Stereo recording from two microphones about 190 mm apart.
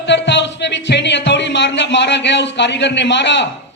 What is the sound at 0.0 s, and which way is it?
Music, 65° left (ahead or behind).